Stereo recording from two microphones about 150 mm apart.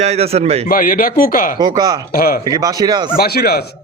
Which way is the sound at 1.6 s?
25° right (ahead or behind).